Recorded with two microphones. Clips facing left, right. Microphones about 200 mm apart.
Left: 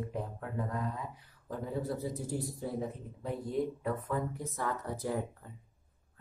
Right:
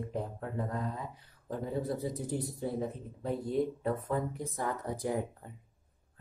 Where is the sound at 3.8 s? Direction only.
35° right (ahead or behind).